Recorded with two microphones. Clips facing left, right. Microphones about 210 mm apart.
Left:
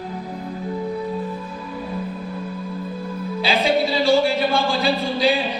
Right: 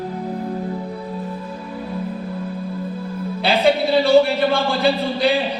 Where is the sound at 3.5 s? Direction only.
60° right (ahead or behind).